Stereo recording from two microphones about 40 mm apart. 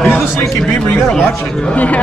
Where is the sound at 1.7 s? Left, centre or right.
Left.